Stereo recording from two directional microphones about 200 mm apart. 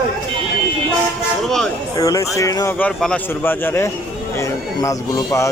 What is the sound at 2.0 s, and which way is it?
A man's voice, 15° left (ahead or behind).